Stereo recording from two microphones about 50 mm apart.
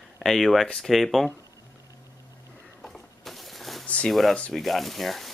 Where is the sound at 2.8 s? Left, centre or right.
Centre.